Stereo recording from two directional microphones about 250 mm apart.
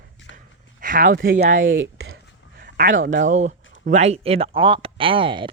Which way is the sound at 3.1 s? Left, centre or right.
Right.